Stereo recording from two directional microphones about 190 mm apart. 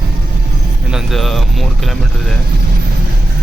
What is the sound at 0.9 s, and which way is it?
Speech, centre (ahead or behind).